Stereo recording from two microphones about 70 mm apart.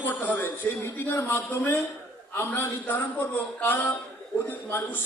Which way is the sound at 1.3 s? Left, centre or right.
Left.